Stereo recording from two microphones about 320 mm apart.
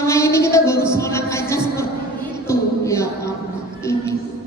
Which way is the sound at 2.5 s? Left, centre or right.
Centre.